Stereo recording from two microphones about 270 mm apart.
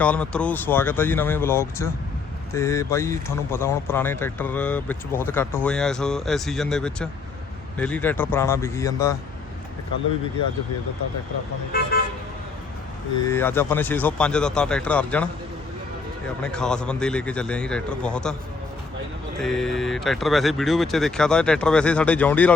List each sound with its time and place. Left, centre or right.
0.0 s speech: centre
11.7 s vehicle: left
13.2 s speech: centre
16.4 s speech: centre
19.4 s speech: centre